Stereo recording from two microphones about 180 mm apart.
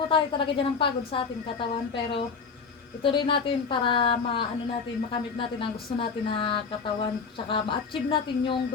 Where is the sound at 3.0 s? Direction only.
30° left (ahead or behind).